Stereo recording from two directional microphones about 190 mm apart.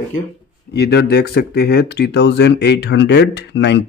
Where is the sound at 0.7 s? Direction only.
60° left (ahead or behind).